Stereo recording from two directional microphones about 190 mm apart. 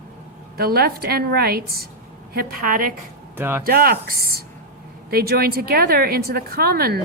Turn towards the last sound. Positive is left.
turn(degrees=-55)  # may be behind; listen again after turning